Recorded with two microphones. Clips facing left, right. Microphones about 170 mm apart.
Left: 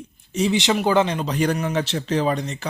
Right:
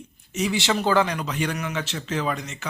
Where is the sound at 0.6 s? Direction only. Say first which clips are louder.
Left 2 dB; 15° left (ahead or behind).